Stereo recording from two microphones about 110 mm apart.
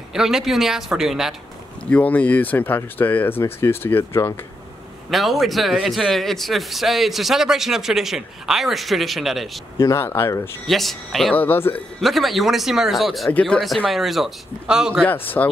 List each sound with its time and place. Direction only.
0.1 s a man's voice: 5° right (ahead or behind)
1.9 s speech: 15° left (ahead or behind)
5.1 s a man's voice: centre (ahead or behind)
9.8 s speech: 25° left (ahead or behind)
10.7 s a man's voice: centre (ahead or behind)
11.3 s speech: 20° left (ahead or behind)
12.0 s a man's voice: centre (ahead or behind)
13.3 s speech: 10° left (ahead or behind)
13.8 s a man's voice: centre (ahead or behind)
15.0 s speech: 15° left (ahead or behind)